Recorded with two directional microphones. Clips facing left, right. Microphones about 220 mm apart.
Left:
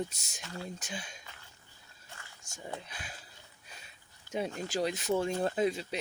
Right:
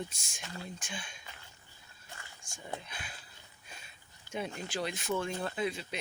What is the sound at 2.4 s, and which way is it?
Speech, 40° left (ahead or behind).